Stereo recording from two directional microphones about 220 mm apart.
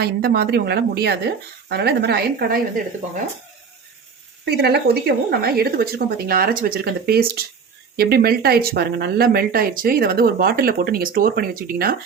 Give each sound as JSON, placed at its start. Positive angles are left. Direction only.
{"t": 0.0, "sound": "speech", "side_deg": -45}
{"t": 4.4, "sound": "speech", "side_deg": -45}